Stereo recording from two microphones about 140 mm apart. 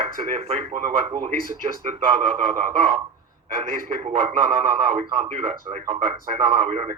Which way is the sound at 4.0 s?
50° right (ahead or behind).